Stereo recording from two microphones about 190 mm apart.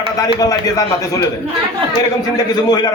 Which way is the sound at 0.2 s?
20° left (ahead or behind).